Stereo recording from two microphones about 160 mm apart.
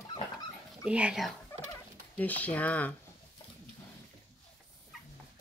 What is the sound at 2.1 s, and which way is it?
Speech, 10° left (ahead or behind).